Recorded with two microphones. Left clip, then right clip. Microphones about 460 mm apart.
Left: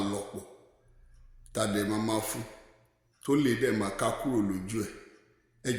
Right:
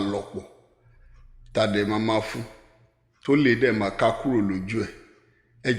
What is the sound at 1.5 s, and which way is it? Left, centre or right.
A man's voice, left.